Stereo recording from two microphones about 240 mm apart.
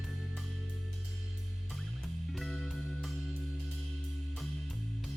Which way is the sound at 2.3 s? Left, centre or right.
Centre.